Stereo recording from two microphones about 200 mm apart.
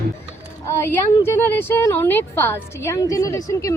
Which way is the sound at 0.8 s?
10° left (ahead or behind).